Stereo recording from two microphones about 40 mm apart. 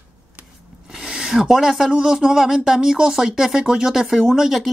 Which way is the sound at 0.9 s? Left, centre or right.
Right.